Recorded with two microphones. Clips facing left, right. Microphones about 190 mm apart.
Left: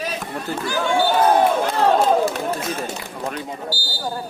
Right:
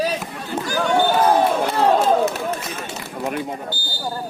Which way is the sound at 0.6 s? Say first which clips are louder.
Right 1 dB; 40° right (ahead or behind).